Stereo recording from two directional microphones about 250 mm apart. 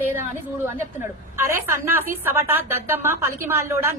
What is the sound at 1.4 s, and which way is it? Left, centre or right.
A woman's voice, centre.